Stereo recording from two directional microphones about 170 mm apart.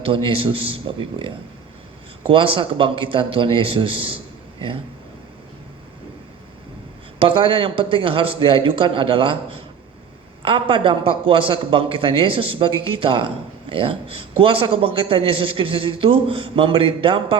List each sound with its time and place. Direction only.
0.0 s a man's voice: 30° right (ahead or behind)
7.2 s a man's voice: 30° right (ahead or behind)